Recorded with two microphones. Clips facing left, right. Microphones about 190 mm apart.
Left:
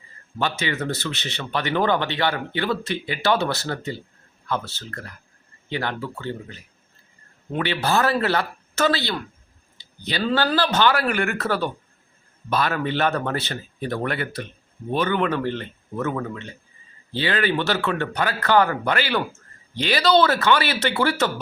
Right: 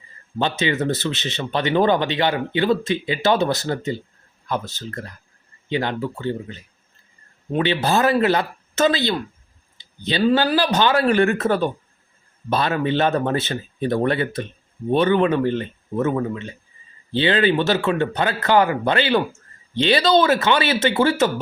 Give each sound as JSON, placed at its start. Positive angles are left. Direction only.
{"t": 0.3, "sound": "speech", "side_deg": -20}